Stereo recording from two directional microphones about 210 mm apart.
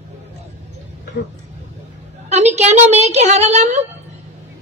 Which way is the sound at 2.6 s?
30° right (ahead or behind).